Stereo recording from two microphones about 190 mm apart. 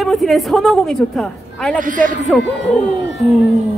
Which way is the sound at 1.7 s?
45° right (ahead or behind).